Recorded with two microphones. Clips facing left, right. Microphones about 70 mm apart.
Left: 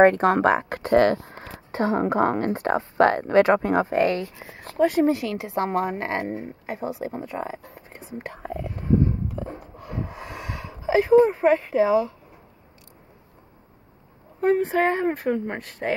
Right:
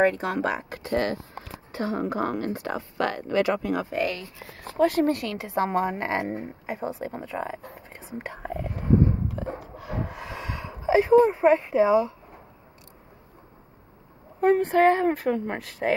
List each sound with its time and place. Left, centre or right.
0.0 s speech: left
0.9 s speech: left
1.3 s speech: left
4.7 s a woman's voice: centre
9.6 s a sound: centre
10.9 s a woman's voice: centre
14.4 s a woman's voice: centre